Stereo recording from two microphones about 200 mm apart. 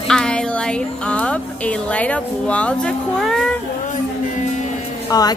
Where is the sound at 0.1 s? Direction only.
5° left (ahead or behind).